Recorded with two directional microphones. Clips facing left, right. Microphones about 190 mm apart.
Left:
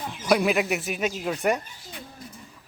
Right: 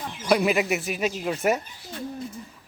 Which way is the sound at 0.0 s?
5° left (ahead or behind).